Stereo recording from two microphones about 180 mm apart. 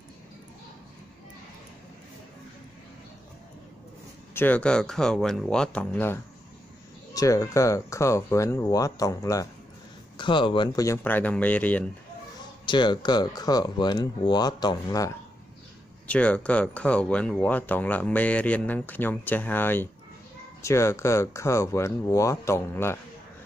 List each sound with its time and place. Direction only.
4.3 s speech: 10° left (ahead or behind)
12.6 s speech: 25° left (ahead or behind)
16.1 s speech: 5° left (ahead or behind)